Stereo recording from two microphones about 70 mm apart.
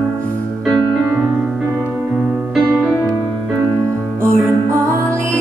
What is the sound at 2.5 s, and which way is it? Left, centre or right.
Music, centre.